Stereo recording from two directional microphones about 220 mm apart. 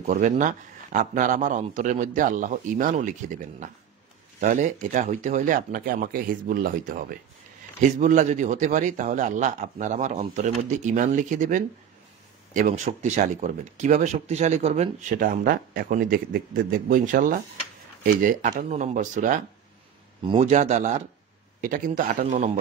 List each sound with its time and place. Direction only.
0.1 s speech: 35° right (ahead or behind)
20.2 s speech: 25° right (ahead or behind)